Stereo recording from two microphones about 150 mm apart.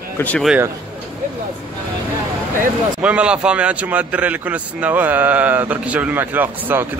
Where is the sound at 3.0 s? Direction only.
5° right (ahead or behind).